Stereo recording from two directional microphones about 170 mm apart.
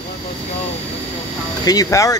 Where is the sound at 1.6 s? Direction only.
20° left (ahead or behind).